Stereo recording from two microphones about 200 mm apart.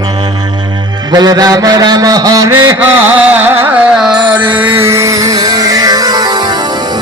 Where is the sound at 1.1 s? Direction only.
20° right (ahead or behind).